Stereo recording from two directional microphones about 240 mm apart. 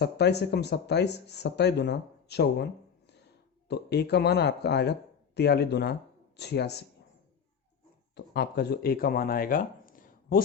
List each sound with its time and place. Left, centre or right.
0.0 s speech: left
3.7 s speech: left
8.1 s speech: left